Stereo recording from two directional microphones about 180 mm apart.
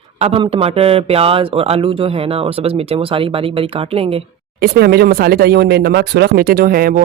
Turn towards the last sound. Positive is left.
turn(degrees=-55)  # may be behind; listen again after turning